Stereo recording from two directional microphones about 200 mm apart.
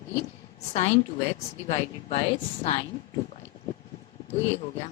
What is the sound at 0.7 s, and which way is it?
Speech, 35° left (ahead or behind).